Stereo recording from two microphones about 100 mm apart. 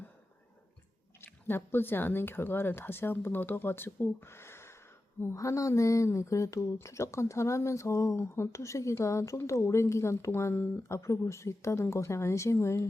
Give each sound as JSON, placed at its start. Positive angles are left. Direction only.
{"t": 1.2, "sound": "speech", "side_deg": 25}